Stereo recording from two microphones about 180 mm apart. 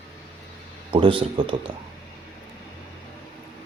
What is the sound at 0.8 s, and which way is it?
Speech, 30° right (ahead or behind).